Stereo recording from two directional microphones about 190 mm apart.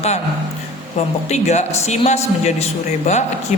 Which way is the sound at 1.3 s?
35° left (ahead or behind).